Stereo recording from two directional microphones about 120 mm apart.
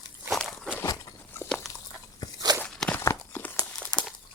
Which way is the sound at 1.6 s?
Centre (ahead or behind).